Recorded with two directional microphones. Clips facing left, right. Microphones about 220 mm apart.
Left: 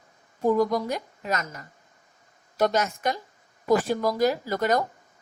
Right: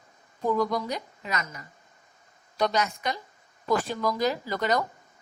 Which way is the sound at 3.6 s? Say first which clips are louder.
Left 4 dB; 15° left (ahead or behind).